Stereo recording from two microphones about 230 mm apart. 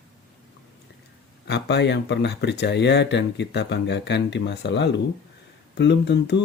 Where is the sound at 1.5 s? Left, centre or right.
Left.